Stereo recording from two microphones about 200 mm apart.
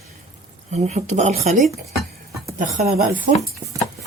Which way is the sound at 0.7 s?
35° right (ahead or behind).